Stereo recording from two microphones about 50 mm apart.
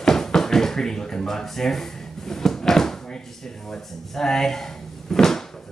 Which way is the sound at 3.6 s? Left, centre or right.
Centre.